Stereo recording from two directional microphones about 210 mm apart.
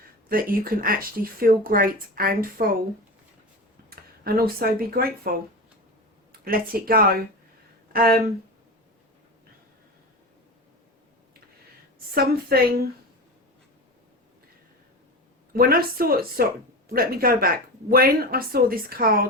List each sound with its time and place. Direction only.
0.3 s speech: 45° right (ahead or behind)
3.8 s speech: 45° right (ahead or behind)
6.3 s speech: 45° right (ahead or behind)
12.1 s speech: 45° right (ahead or behind)
15.5 s speech: 45° right (ahead or behind)